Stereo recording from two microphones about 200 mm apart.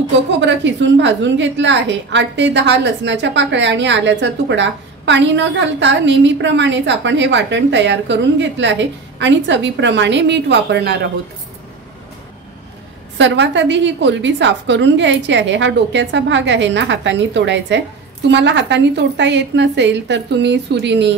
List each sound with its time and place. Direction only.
0.4 s a woman's voice: 65° right (ahead or behind)
13.2 s a woman's voice: 65° right (ahead or behind)